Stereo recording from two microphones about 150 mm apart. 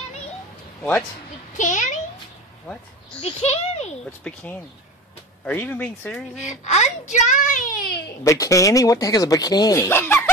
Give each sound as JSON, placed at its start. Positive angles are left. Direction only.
{"t": 1.6, "sound": "a child's voice", "side_deg": 55}
{"t": 3.2, "sound": "a child's voice", "side_deg": 40}
{"t": 4.2, "sound": "speech", "side_deg": 10}
{"t": 6.6, "sound": "a child's voice", "side_deg": 50}
{"t": 8.2, "sound": "speech", "side_deg": 20}